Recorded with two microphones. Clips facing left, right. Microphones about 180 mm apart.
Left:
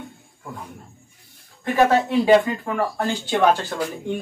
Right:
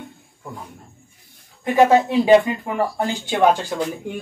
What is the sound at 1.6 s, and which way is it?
Speech, 15° right (ahead or behind).